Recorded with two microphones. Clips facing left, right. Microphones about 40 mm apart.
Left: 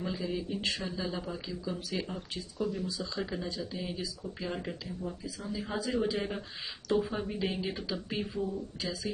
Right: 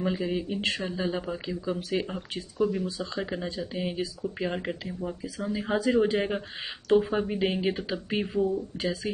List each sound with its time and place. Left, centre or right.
0.0 s speech: right